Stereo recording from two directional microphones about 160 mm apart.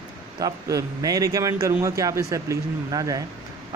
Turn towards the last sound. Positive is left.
turn(degrees=-20)  # may be behind; listen again after turning